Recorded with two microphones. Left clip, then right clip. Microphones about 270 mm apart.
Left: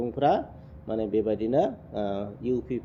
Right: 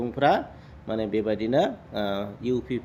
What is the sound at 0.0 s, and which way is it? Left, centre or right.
Speech, centre.